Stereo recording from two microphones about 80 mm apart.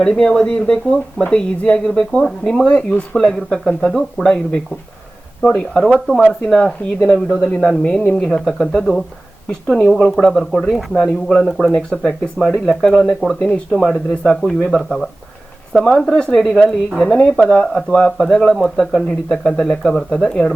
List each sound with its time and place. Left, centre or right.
0.0 s speech: centre
2.6 s speech: centre
3.3 s speech: centre
13.4 s speech: centre